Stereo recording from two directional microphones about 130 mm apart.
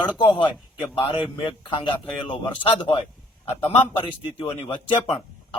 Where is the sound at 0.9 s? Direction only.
45° left (ahead or behind).